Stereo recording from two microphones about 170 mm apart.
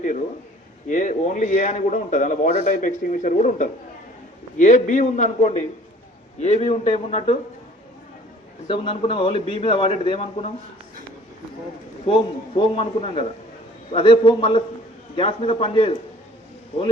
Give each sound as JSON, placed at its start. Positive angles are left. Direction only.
{"t": 0.9, "sound": "a man's voice", "side_deg": 50}
{"t": 8.6, "sound": "a man's voice", "side_deg": 30}
{"t": 12.0, "sound": "a man's voice", "side_deg": 35}